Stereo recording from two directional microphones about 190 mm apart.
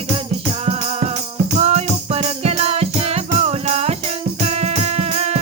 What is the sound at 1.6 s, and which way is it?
Music, 35° right (ahead or behind).